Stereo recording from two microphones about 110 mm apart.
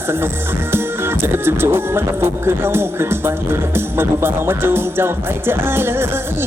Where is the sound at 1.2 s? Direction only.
20° right (ahead or behind).